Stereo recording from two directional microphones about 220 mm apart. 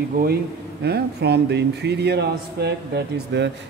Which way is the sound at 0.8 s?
50° right (ahead or behind).